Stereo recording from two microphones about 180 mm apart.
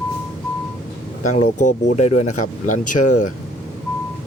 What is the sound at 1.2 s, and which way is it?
Speech, 40° left (ahead or behind).